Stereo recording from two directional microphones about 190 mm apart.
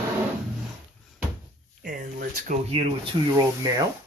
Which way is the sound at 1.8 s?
45° right (ahead or behind).